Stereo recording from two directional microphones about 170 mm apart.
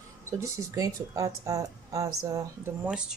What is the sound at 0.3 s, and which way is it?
Speech, 20° right (ahead or behind).